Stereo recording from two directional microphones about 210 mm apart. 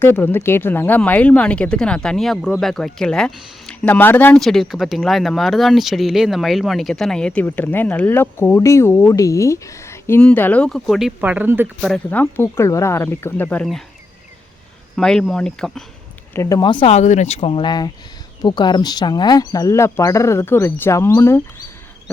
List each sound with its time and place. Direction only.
0.0 s speech: 10° left (ahead or behind); by 11.9 s 5° right (ahead or behind)
12.1 s speech: 10° left (ahead or behind)
14.9 s speech: 5° left (ahead or behind)
16.3 s speech: 15° left (ahead or behind)